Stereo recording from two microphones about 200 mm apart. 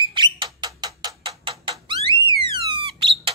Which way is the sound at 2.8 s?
25° right (ahead or behind).